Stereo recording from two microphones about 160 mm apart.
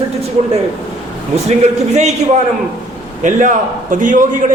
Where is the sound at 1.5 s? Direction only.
45° right (ahead or behind).